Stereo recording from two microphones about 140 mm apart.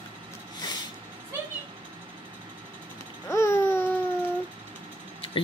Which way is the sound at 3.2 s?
20° left (ahead or behind).